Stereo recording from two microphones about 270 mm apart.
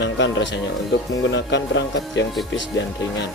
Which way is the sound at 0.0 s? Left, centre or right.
Left.